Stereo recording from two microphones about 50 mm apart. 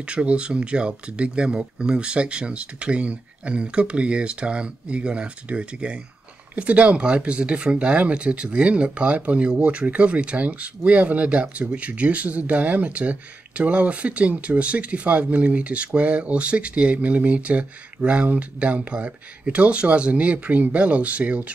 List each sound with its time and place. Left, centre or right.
0.0 s speech: right